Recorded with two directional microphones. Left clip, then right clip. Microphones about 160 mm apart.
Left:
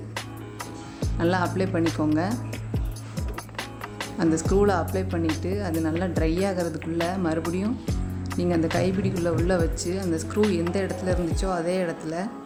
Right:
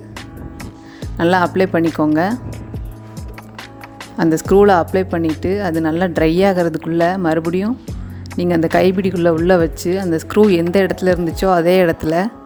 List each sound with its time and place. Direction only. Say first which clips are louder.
1.2 s speech: right 11 dB; 50° right (ahead or behind)
4.2 s speech: right 10 dB; 45° right (ahead or behind)